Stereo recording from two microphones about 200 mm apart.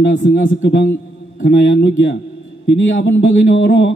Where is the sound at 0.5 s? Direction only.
60° left (ahead or behind).